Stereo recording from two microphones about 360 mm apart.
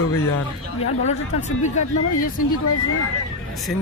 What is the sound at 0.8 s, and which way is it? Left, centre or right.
Speech, centre.